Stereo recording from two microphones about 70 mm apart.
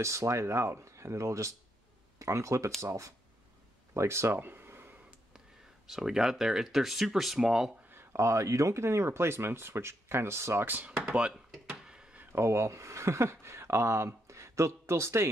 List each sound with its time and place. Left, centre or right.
0.0 s speech: right
3.9 s a sound: right
5.9 s speech: centre
7.9 s speech: right
10.7 s speech: right
11.7 s a sound: centre
12.2 s speech: right